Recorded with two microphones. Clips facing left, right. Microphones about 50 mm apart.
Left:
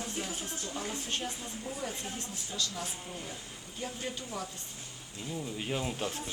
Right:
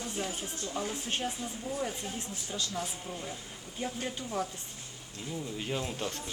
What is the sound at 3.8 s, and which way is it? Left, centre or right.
Speech, centre.